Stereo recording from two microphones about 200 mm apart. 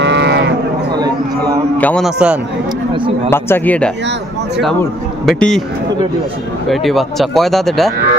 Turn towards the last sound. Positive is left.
turn(degrees=0)  # may be behind; listen again after turning